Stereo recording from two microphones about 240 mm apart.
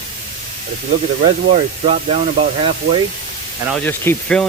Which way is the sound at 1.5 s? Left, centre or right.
Right.